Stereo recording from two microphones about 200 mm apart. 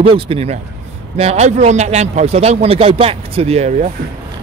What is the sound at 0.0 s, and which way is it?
Speech, 30° right (ahead or behind).